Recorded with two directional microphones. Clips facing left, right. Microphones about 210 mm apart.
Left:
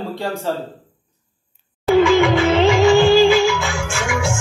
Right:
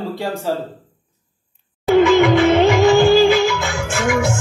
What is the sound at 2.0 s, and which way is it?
Music of bollywood, 45° right (ahead or behind).